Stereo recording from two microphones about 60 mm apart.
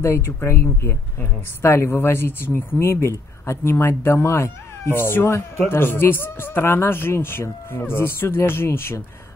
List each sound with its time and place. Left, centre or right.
0.0 s a man's voice: left